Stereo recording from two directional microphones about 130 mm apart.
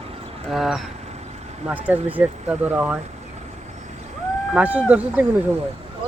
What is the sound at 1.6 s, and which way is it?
Speech, 15° right (ahead or behind).